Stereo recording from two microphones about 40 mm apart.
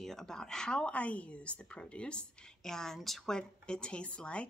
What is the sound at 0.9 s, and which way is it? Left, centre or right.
A woman's voice, left.